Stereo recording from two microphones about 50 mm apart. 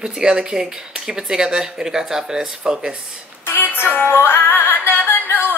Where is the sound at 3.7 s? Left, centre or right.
Left.